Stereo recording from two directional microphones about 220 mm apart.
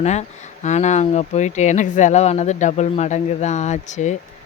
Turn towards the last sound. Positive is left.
turn(degrees=35)  # may be behind; listen again after turning